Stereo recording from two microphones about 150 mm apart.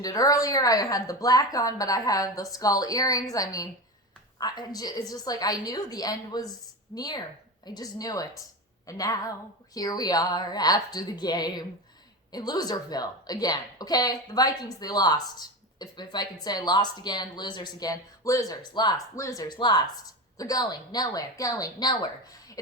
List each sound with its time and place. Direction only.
0.0 s a woman's voice: 25° left (ahead or behind)